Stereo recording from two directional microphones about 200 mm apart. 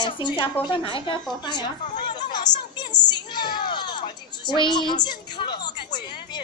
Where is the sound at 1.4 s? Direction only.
20° left (ahead or behind).